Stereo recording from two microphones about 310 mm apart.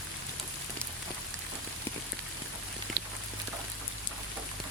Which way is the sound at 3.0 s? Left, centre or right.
Right.